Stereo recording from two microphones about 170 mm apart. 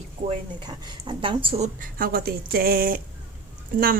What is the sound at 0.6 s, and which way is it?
A woman's voice, 30° right (ahead or behind).